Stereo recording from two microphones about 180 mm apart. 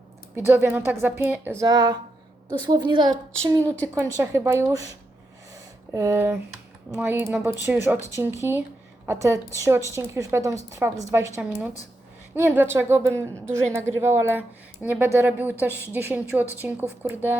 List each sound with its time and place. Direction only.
0.3 s speech: 15° right (ahead or behind)
1.6 s a woman's voice: 25° right (ahead or behind)
3.9 s speech: 15° right (ahead or behind)
5.9 s speech: 15° right (ahead or behind)